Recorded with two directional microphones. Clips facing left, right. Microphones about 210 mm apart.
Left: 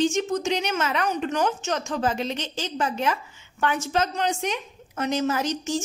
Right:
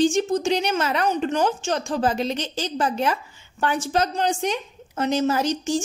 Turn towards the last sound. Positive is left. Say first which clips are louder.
# right 3 dB
turn(degrees=-30)  # may be behind; listen again after turning